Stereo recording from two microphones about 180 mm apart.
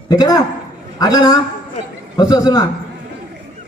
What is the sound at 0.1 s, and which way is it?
A man's voice, 20° left (ahead or behind).